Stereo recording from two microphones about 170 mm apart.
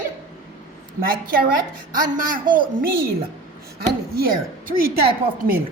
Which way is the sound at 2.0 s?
55° right (ahead or behind).